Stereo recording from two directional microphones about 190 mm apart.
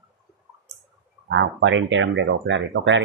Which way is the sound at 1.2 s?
75° right (ahead or behind).